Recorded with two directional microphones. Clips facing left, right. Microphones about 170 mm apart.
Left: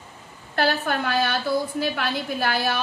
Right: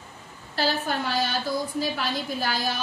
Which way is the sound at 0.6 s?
60° left (ahead or behind).